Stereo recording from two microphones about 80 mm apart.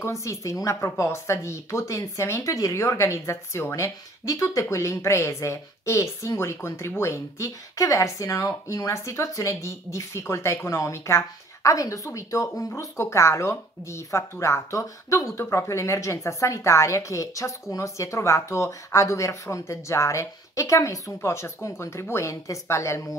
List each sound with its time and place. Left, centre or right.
0.0 s speech: left